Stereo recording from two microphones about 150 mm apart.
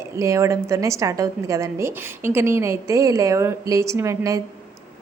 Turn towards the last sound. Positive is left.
turn(degrees=-20)  # may be behind; listen again after turning